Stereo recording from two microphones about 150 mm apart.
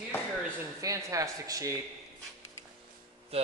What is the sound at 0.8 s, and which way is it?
Speech, 20° right (ahead or behind).